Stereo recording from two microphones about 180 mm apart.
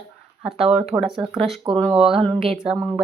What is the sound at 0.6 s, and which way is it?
A woman's voice, centre (ahead or behind).